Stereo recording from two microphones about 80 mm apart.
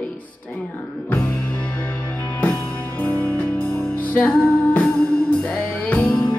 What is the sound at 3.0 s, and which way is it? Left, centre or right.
Music, centre.